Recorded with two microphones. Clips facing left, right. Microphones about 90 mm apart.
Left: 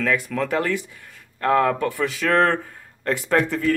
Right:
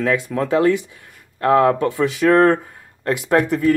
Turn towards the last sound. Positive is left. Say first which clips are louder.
# right 4 dB
turn(degrees=-15)  # may be behind; listen again after turning